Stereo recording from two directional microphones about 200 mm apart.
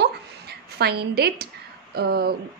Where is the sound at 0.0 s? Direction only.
55° right (ahead or behind).